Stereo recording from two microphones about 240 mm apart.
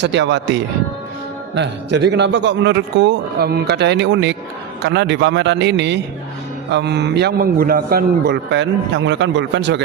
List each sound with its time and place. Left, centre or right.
0.0 s a man's voice: right